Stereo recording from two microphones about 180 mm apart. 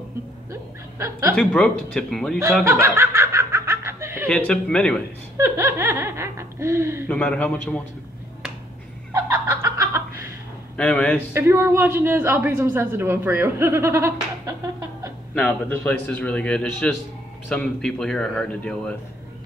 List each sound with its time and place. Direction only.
0.5 s laughter: 15° right (ahead or behind)
1.3 s speech: 5° left (ahead or behind)
2.6 s snicker: 15° right (ahead or behind)
4.3 s speech: 5° left (ahead or behind)
5.4 s a woman's voice: 15° right (ahead or behind)
7.1 s a man's voice: 5° left (ahead or behind)
9.1 s a sound: 15° right (ahead or behind)
10.8 s speech: 5° left (ahead or behind)
11.3 s a woman's voice: 15° right (ahead or behind)
15.3 s a man's voice: 5° left (ahead or behind)